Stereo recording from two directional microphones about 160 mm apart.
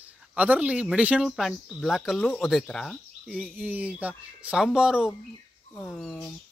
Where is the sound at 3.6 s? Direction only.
10° right (ahead or behind).